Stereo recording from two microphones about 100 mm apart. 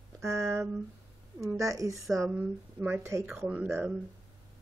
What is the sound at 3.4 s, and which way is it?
Speech, 15° right (ahead or behind).